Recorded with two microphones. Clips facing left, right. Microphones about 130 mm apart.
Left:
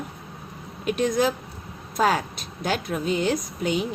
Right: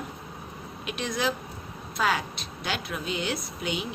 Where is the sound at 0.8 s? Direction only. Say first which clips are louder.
Left 7 dB; 45° left (ahead or behind).